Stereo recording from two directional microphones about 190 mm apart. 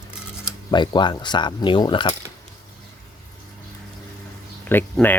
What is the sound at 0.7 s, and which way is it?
Speech, 25° left (ahead or behind).